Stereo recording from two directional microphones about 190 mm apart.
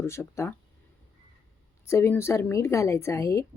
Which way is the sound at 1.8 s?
15° left (ahead or behind).